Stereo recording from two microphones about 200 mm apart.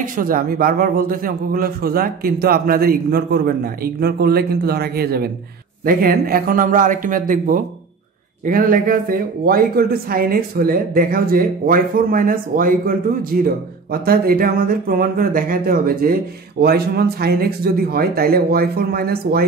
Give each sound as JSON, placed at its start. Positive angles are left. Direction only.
{"t": 0.0, "sound": "a man's voice", "side_deg": -45}